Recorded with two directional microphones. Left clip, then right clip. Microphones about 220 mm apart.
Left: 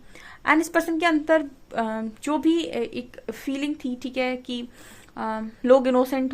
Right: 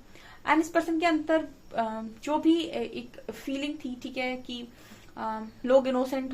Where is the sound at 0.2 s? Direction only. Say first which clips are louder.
Left 4 dB; 45° left (ahead or behind).